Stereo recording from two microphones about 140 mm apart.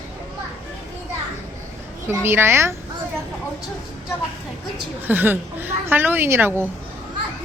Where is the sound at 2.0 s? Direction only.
15° right (ahead or behind).